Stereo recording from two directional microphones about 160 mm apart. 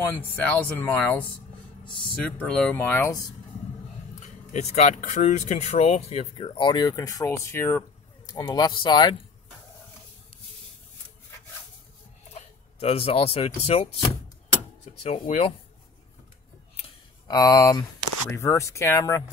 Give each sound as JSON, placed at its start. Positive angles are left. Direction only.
{"t": 0.0, "sound": "speech", "side_deg": 10}
{"t": 2.2, "sound": "speech", "side_deg": 10}
{"t": 4.2, "sound": "speech", "side_deg": 45}
{"t": 12.8, "sound": "speech", "side_deg": 40}
{"t": 15.0, "sound": "speech", "side_deg": 40}
{"t": 17.3, "sound": "speech", "side_deg": 25}